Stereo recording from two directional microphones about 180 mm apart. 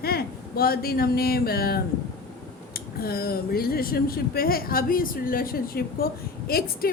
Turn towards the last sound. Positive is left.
turn(degrees=55)  # may be behind; listen again after turning